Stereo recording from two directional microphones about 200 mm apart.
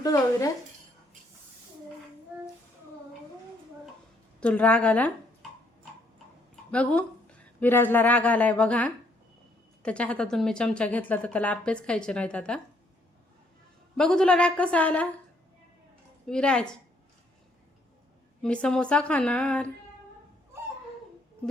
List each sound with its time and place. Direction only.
0.0 s speech: 15° left (ahead or behind)
4.4 s speech: 5° left (ahead or behind)
6.7 s speech: 5° left (ahead or behind)
13.9 s speech: 5° left (ahead or behind)
16.2 s speech: 5° left (ahead or behind)
18.4 s speech: 5° left (ahead or behind)